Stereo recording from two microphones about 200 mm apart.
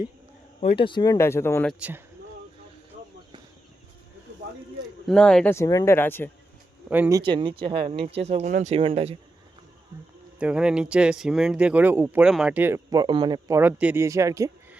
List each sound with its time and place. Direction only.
0.6 s speech: 30° left (ahead or behind); by 1.7 s 10° left (ahead or behind)
5.0 s speech: 5° left (ahead or behind)
6.9 s speech: 10° right (ahead or behind)
7.3 s speech: 25° right (ahead or behind)
10.4 s speech: 5° right (ahead or behind); by 13.6 s 20° right (ahead or behind)
13.6 s speech: 10° right (ahead or behind)